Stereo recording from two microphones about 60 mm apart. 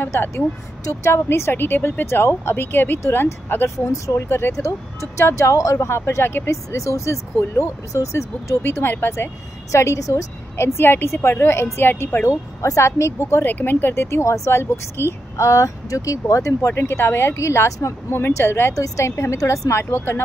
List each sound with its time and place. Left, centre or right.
0.0 s speech: left
0.8 s speech: left
3.0 s speech: left
3.7 s speech: left
4.3 s speech: left
6.5 s speech: left
8.8 s speech: left
9.7 s speech: left
10.6 s speech: left
12.6 s speech: left
13.5 s speech: left
14.6 s speech: left
15.3 s speech: left
18.7 s speech: left